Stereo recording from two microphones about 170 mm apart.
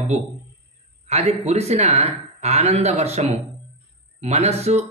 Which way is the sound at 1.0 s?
40° right (ahead or behind).